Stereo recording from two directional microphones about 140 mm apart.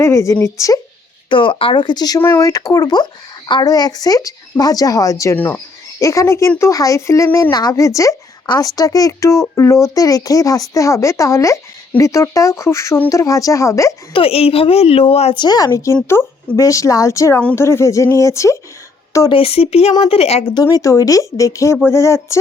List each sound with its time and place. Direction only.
0.0 s speech: 20° left (ahead or behind)
1.3 s speech: 35° left (ahead or behind); by 13.9 s 20° left (ahead or behind)
14.1 s speech: 40° left (ahead or behind)
15.4 s speech: 30° left (ahead or behind)
19.3 s speech: 40° left (ahead or behind)
20.5 s speech: 30° left (ahead or behind)